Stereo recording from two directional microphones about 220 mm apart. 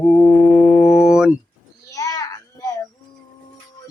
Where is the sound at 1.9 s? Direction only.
15° left (ahead or behind).